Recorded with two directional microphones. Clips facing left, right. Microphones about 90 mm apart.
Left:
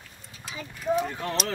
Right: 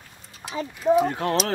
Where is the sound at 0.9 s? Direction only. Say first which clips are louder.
Right 7 dB; 30° right (ahead or behind).